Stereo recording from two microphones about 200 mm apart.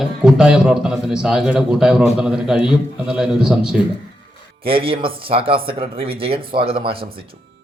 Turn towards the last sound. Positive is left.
turn(degrees=-25)  # may be behind; listen again after turning